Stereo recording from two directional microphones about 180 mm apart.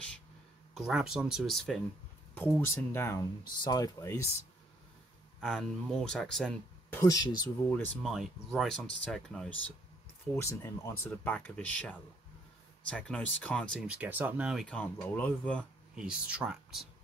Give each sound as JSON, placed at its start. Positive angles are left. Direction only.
{"t": 0.7, "sound": "speech", "side_deg": -5}
{"t": 2.3, "sound": "speech", "side_deg": 10}
{"t": 5.4, "sound": "speech", "side_deg": 0}
{"t": 7.0, "sound": "speech", "side_deg": 20}
{"t": 7.7, "sound": "speech", "side_deg": 5}
{"t": 10.3, "sound": "speech", "side_deg": 15}
{"t": 16.0, "sound": "speech", "side_deg": -5}